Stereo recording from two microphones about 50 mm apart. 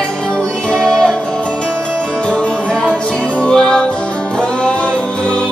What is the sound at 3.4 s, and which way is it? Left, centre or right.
Music, centre.